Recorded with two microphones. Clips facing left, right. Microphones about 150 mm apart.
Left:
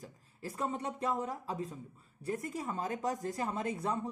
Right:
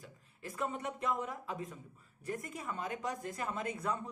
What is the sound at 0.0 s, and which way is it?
Speech, 35° left (ahead or behind).